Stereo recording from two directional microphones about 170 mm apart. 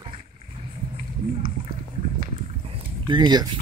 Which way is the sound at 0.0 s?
30° right (ahead or behind).